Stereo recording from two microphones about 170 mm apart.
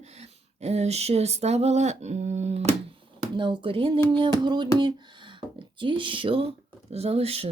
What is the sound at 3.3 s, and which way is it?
Speech, 30° right (ahead or behind).